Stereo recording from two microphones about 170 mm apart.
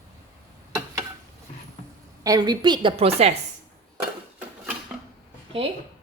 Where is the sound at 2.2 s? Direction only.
20° right (ahead or behind); by 3.3 s 35° right (ahead or behind).